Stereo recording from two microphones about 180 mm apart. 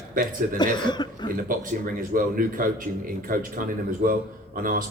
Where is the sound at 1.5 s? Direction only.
50° right (ahead or behind).